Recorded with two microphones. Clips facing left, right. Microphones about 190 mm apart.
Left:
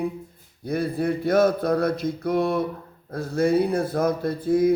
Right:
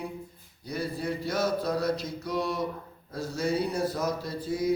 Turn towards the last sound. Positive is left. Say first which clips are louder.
# left 9 dB
turn(degrees=55)  # may be behind; listen again after turning